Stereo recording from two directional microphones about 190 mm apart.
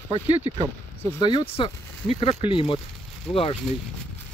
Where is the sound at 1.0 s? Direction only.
20° left (ahead or behind).